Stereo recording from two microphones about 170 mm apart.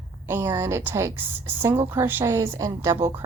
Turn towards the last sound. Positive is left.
turn(degrees=-15)  # may be behind; listen again after turning